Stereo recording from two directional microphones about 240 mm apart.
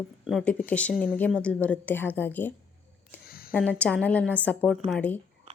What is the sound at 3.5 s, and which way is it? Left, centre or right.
A woman's voice, centre.